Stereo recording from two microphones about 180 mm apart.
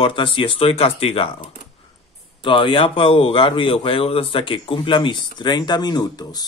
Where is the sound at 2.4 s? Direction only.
25° left (ahead or behind).